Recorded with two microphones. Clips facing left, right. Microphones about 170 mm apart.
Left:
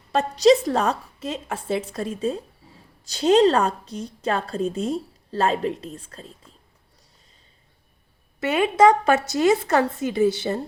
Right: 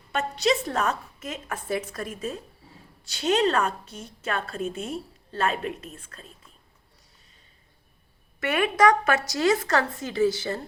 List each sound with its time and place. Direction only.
0.1 s a woman's voice: 35° left (ahead or behind)
8.4 s a woman's voice: 25° left (ahead or behind)
9.5 s speech: 15° left (ahead or behind)